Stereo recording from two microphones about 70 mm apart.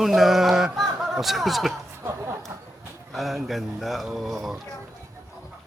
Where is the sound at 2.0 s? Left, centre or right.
Right.